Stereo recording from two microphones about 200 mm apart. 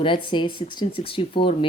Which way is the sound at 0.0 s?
25° left (ahead or behind).